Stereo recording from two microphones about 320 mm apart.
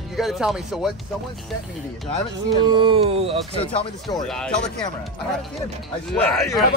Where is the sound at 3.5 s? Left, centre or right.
Centre.